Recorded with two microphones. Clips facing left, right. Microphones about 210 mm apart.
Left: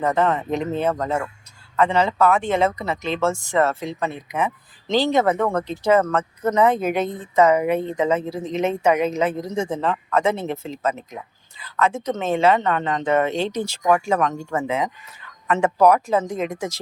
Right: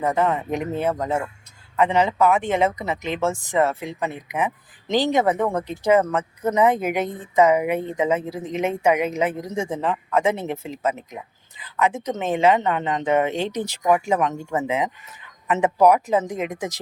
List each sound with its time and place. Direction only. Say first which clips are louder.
0.0 s speech: left 1 dB; 10° right (ahead or behind)